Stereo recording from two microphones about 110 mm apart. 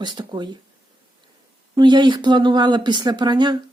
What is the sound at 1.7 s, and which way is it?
Speech, 40° right (ahead or behind).